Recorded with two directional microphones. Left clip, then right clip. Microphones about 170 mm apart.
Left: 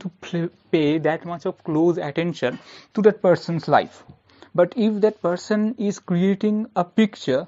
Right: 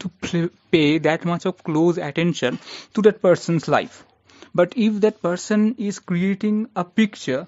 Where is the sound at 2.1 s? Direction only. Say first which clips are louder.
Right 2 dB; 55° right (ahead or behind).